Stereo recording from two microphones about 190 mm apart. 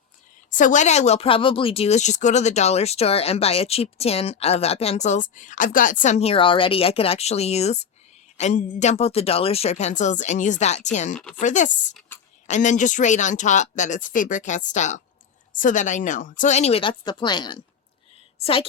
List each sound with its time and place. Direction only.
0.5 s speech: 40° left (ahead or behind)
11.9 s a sound: 10° left (ahead or behind)
12.5 s a woman's voice: 40° left (ahead or behind)